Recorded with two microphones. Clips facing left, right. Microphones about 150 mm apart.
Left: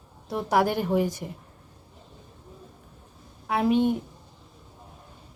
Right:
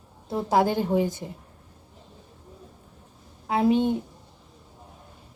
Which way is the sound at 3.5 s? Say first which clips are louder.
Right 1 dB; 25° right (ahead or behind).